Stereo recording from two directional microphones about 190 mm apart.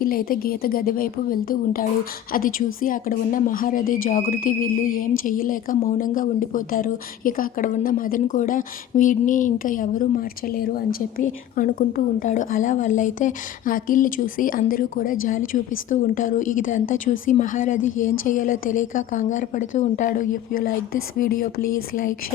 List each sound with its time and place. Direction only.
0.0 s a woman's voice: 50° left (ahead or behind)